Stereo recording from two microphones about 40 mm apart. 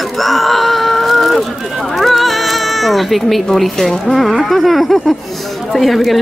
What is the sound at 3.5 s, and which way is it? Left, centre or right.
Speech, centre.